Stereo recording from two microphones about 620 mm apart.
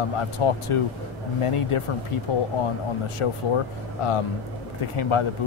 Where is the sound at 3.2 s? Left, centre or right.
Left.